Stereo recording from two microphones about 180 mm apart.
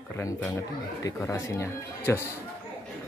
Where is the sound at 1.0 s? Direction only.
15° left (ahead or behind).